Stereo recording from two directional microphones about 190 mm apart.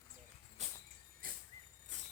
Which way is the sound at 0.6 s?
35° right (ahead or behind).